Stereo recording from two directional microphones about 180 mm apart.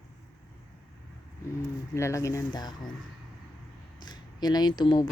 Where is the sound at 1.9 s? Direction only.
15° left (ahead or behind).